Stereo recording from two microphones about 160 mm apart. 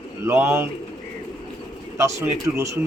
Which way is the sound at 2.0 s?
15° right (ahead or behind).